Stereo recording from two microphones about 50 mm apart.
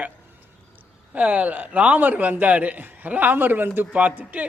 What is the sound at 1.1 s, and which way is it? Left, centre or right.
A man's voice, right.